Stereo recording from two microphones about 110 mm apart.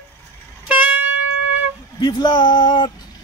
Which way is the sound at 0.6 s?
10° right (ahead or behind).